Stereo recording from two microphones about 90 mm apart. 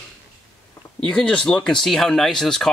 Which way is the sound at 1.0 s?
10° left (ahead or behind).